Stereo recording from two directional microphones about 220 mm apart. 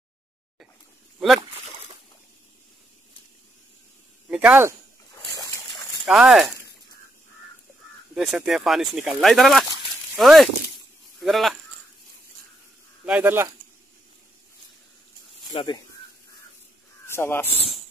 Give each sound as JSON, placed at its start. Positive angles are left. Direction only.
{"t": 4.3, "sound": "speech", "side_deg": -5}
{"t": 6.0, "sound": "speech", "side_deg": 0}
{"t": 8.1, "sound": "speech", "side_deg": 0}
{"t": 13.0, "sound": "speech", "side_deg": -5}
{"t": 15.5, "sound": "speech", "side_deg": 20}
{"t": 17.0, "sound": "speech", "side_deg": 10}